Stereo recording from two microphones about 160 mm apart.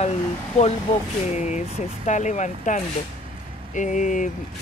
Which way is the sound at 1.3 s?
50° left (ahead or behind).